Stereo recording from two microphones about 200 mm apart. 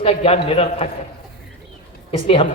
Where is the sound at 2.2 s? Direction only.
30° left (ahead or behind).